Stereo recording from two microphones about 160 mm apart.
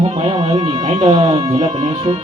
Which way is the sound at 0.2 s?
35° right (ahead or behind).